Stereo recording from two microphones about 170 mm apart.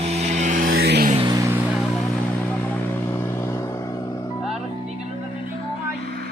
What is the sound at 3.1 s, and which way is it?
Vehicle, 15° left (ahead or behind).